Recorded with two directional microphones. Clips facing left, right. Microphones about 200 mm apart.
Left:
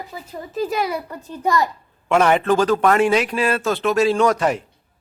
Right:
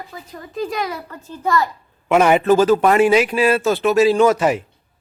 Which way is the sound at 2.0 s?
5° right (ahead or behind).